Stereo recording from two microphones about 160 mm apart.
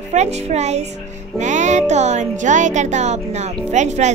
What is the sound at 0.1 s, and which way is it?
Speech, 45° right (ahead or behind).